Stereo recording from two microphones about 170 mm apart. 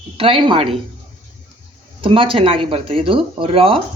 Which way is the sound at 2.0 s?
30° right (ahead or behind).